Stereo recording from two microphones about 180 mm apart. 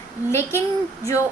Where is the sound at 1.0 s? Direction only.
15° left (ahead or behind).